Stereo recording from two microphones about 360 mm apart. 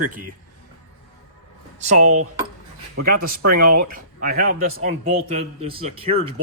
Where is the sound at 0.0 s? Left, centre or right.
Right.